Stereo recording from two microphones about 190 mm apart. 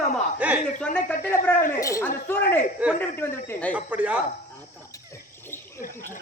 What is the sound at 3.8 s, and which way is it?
Speech, 5° right (ahead or behind).